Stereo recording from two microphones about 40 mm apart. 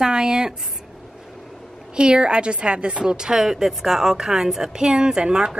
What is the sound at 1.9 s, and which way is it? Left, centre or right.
A woman's voice, right.